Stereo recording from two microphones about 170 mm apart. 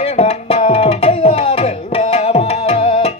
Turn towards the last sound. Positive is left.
turn(degrees=35)  # may be behind; listen again after turning